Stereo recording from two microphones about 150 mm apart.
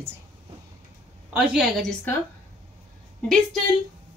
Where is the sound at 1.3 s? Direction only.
5° right (ahead or behind).